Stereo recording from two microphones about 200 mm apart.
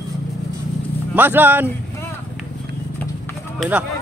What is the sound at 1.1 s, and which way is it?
Speech, 10° right (ahead or behind).